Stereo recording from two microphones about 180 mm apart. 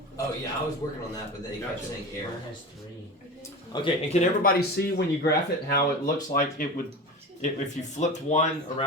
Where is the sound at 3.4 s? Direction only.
25° left (ahead or behind).